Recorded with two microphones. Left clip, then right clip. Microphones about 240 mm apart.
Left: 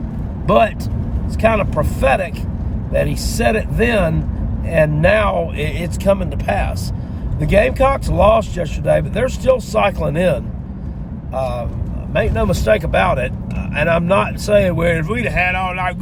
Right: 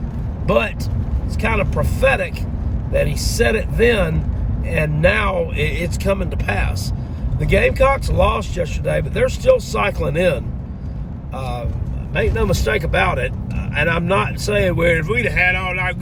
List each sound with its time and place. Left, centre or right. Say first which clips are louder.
0.4 s speech: left 5 dB; centre
12.2 s speech: even; centre